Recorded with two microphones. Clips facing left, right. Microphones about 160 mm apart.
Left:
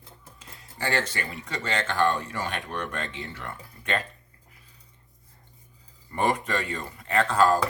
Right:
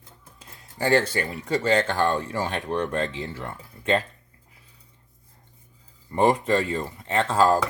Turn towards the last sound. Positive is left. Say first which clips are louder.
# right 1 dB
turn(degrees=-20)  # may be behind; listen again after turning